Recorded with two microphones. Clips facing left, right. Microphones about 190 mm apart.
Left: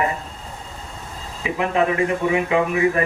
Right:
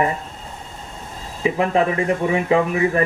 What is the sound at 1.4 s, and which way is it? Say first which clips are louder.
A man's voice: right 2 dB; 35° right (ahead or behind).